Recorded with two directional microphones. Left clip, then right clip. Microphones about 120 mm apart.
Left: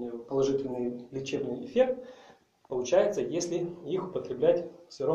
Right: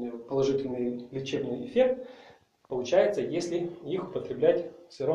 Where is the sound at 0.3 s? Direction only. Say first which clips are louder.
Right 1 dB; 15° left (ahead or behind).